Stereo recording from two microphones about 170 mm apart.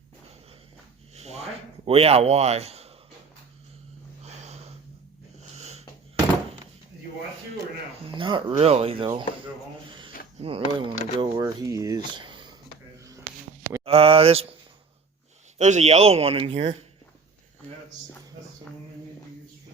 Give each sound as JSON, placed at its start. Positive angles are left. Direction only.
{"t": 1.1, "sound": "speech", "side_deg": -40}
{"t": 4.2, "sound": "a sound", "side_deg": -40}
{"t": 5.4, "sound": "wheeze", "side_deg": -40}
{"t": 8.0, "sound": "speech", "side_deg": -30}
{"t": 10.4, "sound": "speech", "side_deg": -30}
{"t": 13.8, "sound": "speech", "side_deg": -35}
{"t": 15.5, "sound": "speech", "side_deg": -45}